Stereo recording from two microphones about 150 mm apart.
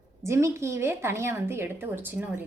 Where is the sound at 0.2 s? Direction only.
20° right (ahead or behind).